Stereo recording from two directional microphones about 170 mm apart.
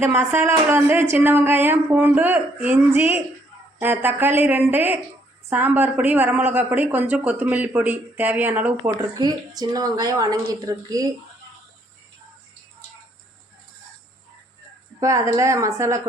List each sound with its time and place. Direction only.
0.0 s speech: 10° right (ahead or behind)
9.1 s a woman's voice: 25° right (ahead or behind)
15.0 s speech: 20° right (ahead or behind)